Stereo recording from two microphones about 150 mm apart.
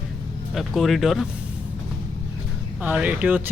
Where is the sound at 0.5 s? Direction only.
Centre (ahead or behind).